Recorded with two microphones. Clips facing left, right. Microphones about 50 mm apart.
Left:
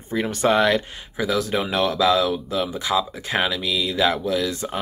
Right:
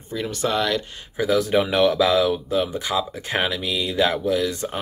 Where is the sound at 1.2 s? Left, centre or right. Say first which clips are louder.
Right 3 dB; centre.